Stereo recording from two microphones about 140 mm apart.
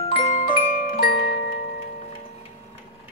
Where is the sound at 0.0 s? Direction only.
45° left (ahead or behind).